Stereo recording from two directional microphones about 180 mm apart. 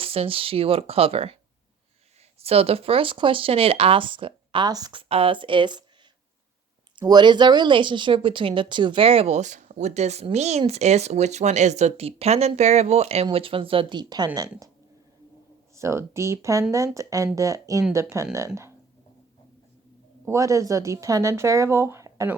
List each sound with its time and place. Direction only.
0.0 s speech: 30° right (ahead or behind)
2.4 s speech: 35° right (ahead or behind)
7.0 s speech: 25° right (ahead or behind)
15.7 s speech: 15° right (ahead or behind)
20.2 s speech: 15° right (ahead or behind)